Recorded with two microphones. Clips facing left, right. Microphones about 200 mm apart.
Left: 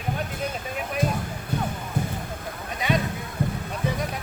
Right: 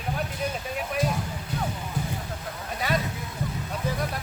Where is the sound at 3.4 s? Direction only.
55° left (ahead or behind).